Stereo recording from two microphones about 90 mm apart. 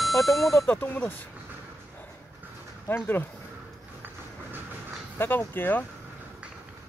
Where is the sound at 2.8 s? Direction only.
25° left (ahead or behind).